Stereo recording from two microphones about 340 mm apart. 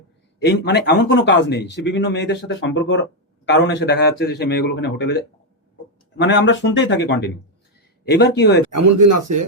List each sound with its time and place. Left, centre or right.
0.4 s a man's voice: left
8.7 s speech: right